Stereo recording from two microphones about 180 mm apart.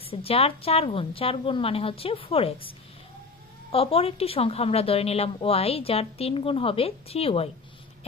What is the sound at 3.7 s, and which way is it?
A woman's voice, 30° left (ahead or behind).